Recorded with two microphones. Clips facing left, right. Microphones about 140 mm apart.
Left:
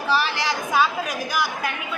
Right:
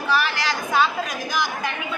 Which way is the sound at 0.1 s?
25° left (ahead or behind).